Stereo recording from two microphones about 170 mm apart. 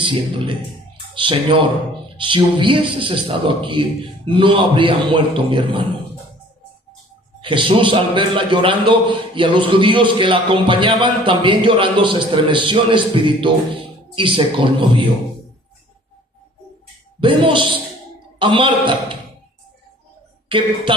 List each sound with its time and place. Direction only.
0.0 s a man's voice: 30° right (ahead or behind)
7.4 s a man's voice: 30° right (ahead or behind)
17.2 s a man's voice: 30° right (ahead or behind)